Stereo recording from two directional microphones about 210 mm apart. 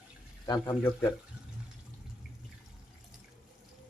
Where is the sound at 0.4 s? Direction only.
20° left (ahead or behind).